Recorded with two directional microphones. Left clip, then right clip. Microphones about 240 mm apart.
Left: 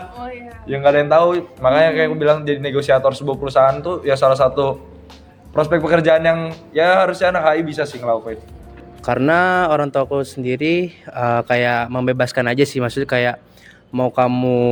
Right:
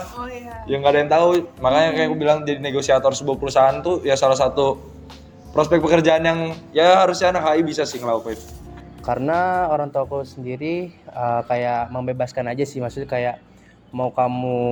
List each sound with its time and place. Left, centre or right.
0.2 s speech: centre
0.7 s speech: left
3.4 s a man's voice: centre
9.0 s speech: left